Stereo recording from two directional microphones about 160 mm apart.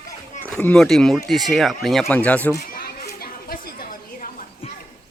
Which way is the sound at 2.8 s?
70° left (ahead or behind).